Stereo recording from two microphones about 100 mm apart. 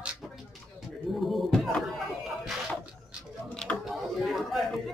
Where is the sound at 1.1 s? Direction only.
Centre (ahead or behind).